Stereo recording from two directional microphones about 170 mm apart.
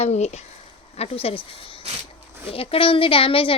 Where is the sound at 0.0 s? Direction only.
40° left (ahead or behind).